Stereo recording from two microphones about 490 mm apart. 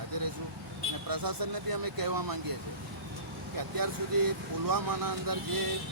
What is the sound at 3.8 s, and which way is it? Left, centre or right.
Speech, right.